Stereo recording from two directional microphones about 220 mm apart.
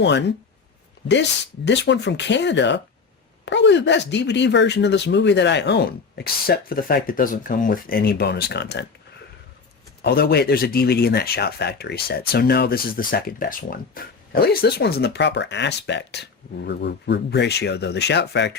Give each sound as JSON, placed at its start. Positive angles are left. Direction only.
{"t": 0.0, "sound": "speech", "side_deg": 50}
{"t": 10.0, "sound": "speech", "side_deg": 45}